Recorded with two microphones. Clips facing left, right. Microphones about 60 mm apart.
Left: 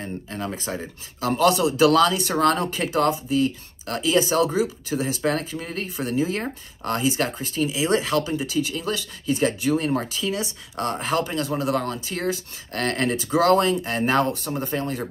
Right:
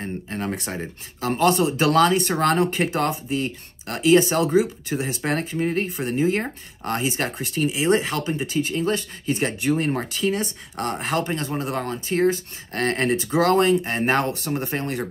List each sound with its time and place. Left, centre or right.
0.0 s a sound: right
0.7 s speech: right
1.2 s speech: right